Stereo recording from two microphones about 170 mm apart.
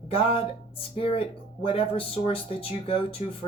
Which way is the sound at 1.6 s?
35° left (ahead or behind).